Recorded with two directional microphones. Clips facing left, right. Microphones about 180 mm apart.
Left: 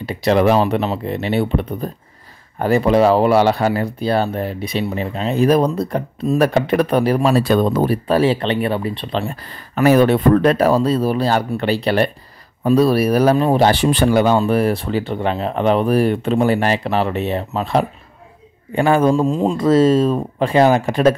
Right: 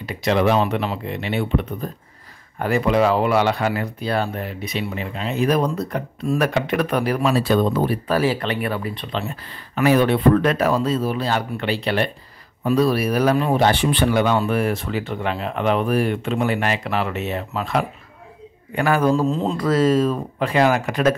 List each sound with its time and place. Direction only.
0.0 s speech: 30° left (ahead or behind)
7.3 s speech: 50° left (ahead or behind)
8.1 s speech: 25° left (ahead or behind)
19.2 s speech: 15° left (ahead or behind); by 21.2 s 30° left (ahead or behind)